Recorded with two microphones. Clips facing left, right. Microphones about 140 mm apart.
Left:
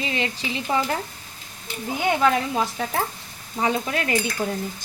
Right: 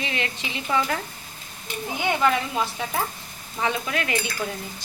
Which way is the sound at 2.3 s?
35° left (ahead or behind).